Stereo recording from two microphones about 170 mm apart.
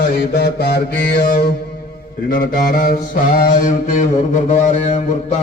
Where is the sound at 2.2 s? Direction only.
55° left (ahead or behind).